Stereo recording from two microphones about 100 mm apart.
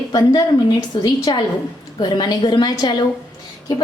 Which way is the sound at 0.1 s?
40° left (ahead or behind).